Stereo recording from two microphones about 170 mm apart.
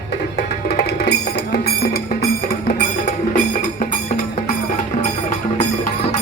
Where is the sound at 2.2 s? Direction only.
50° left (ahead or behind).